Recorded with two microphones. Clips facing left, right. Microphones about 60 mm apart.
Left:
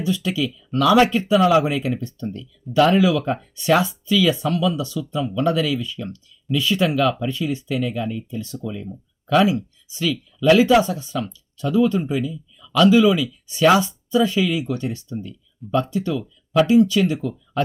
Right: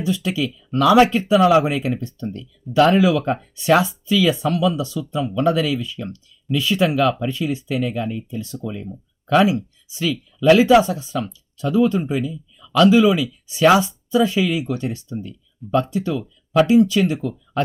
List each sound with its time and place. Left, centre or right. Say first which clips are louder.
0.0 s speech: right 1 dB; right